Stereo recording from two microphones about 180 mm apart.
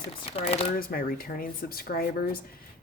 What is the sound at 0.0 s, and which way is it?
Speech, 30° left (ahead or behind).